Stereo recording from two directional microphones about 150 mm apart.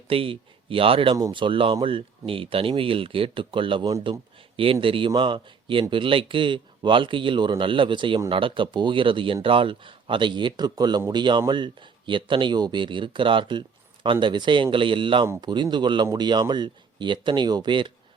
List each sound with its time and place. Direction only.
0.1 s speech: 35° right (ahead or behind)
4.5 s speech: 35° right (ahead or behind)